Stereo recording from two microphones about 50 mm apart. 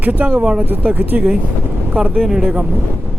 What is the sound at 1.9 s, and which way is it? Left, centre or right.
Speech, right.